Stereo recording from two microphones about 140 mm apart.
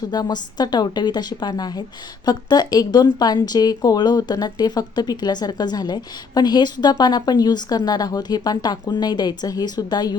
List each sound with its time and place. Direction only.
0.1 s a woman's voice: 30° left (ahead or behind)